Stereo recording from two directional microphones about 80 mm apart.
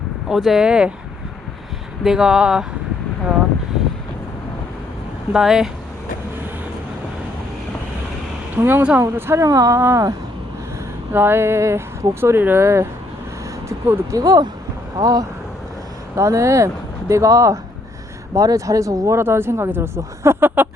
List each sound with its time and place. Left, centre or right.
0.3 s speech: centre
2.0 s speech: centre
5.3 s speech: centre
8.5 s speech: right
9.4 s speech: right
11.1 s speech: right
14.2 s speech: right
16.1 s speech: right